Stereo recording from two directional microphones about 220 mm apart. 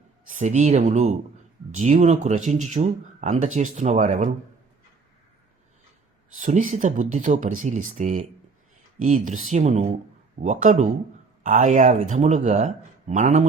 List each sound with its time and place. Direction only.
0.3 s speech: 35° right (ahead or behind)
6.3 s speech: 35° right (ahead or behind)